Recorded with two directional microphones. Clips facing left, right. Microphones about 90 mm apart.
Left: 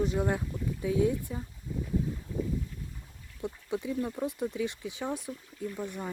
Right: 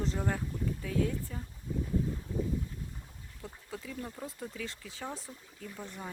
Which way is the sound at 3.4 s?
20° left (ahead or behind).